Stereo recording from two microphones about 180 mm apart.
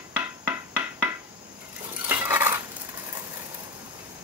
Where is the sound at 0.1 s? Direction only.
10° right (ahead or behind).